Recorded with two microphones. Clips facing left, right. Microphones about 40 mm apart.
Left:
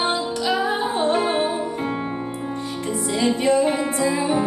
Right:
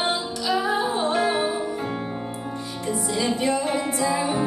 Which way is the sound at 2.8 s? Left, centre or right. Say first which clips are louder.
Left 3 dB; left.